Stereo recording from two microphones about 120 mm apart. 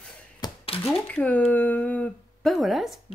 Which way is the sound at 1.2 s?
10° left (ahead or behind).